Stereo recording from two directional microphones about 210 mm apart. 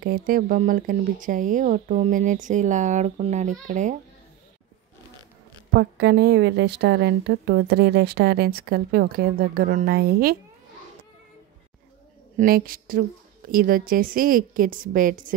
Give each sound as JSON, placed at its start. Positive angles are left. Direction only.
{"t": 0.0, "sound": "speech", "side_deg": -45}
{"t": 5.7, "sound": "speech", "side_deg": -55}
{"t": 12.4, "sound": "speech", "side_deg": -45}